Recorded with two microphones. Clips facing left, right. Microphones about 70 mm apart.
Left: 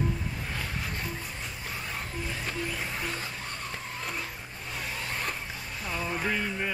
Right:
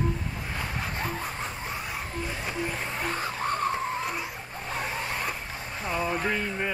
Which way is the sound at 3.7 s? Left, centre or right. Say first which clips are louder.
Right 9 dB; right.